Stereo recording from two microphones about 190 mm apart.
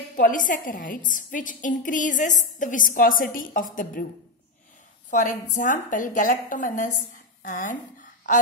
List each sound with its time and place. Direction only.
0.1 s a woman's voice: 45° left (ahead or behind)
5.1 s a woman's voice: 40° left (ahead or behind)